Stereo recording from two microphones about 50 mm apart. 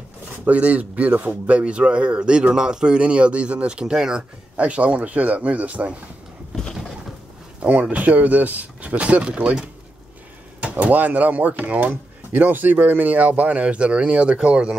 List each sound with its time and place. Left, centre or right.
0.5 s speech: right
4.6 s speech: right
7.9 s speech: right